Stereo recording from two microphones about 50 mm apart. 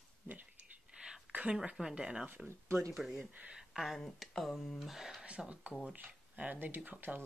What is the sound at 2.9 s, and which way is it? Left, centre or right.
Speech, centre.